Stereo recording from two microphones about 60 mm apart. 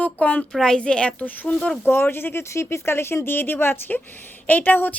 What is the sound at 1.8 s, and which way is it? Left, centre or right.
Speech, left.